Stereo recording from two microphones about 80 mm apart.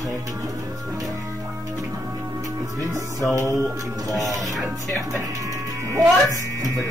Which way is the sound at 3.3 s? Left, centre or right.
Right.